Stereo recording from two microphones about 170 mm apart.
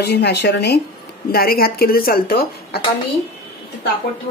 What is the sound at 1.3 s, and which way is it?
A woman's voice, 60° left (ahead or behind).